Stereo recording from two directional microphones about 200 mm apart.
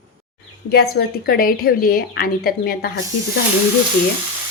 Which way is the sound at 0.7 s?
50° left (ahead or behind).